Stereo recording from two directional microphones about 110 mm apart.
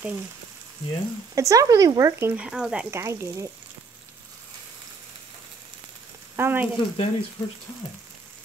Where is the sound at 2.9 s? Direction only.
25° right (ahead or behind).